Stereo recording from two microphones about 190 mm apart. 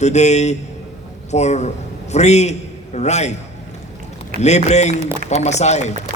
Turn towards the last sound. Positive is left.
turn(degrees=35)  # may be behind; listen again after turning